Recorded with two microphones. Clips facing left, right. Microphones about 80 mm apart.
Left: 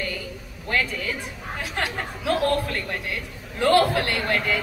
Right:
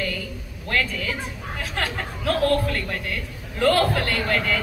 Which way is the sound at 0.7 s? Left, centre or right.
Centre.